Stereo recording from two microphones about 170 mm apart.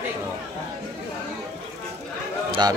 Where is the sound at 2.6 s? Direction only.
25° right (ahead or behind).